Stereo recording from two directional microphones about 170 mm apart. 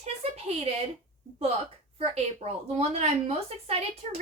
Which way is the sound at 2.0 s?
40° right (ahead or behind).